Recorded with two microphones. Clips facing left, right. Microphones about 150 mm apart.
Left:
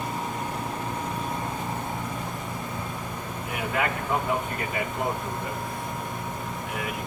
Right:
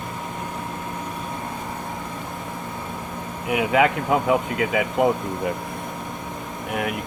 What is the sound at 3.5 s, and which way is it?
Speech, 90° right.